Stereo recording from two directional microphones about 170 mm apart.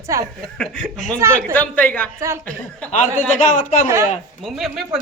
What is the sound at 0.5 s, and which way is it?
A woman's voice, 5° left (ahead or behind).